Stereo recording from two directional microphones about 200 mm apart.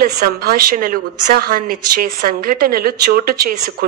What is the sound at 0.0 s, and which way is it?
A woman's voice, 50° right (ahead or behind).